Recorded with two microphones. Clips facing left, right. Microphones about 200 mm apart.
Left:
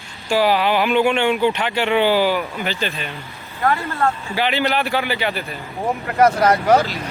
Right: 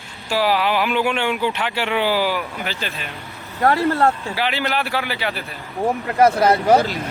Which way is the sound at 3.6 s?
40° right (ahead or behind).